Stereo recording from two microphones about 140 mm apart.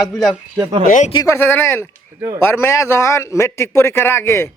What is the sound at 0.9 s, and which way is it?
Speech, 65° left (ahead or behind).